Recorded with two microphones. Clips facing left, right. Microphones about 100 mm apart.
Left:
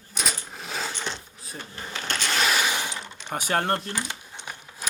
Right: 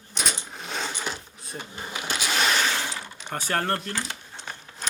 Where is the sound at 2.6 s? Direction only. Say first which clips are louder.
Even; 15° left (ahead or behind).